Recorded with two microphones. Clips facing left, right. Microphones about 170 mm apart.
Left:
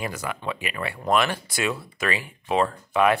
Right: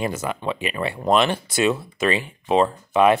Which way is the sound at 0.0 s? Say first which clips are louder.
Right 5 dB; 25° right (ahead or behind).